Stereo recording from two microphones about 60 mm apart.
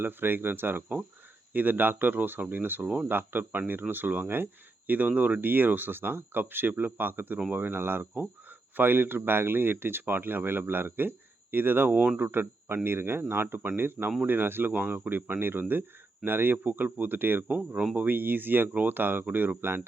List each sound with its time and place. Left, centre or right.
0.0 s speech: right
11.9 s speech: right
12.3 s speech: right
17.5 s speech: right